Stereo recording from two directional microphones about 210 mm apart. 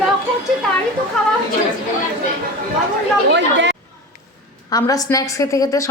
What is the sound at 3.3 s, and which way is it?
Speech, 55° right (ahead or behind).